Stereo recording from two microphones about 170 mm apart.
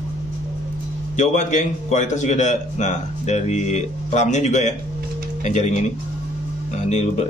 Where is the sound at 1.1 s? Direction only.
45° left (ahead or behind).